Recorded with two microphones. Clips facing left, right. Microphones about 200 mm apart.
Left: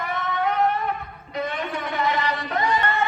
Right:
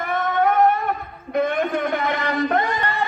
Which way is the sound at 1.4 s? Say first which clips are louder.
Right 7 dB; 55° right (ahead or behind).